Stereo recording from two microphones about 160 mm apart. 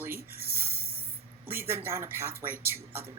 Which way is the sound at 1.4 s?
15° right (ahead or behind).